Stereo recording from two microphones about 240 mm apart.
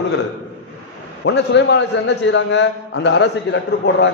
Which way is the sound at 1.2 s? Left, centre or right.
Left.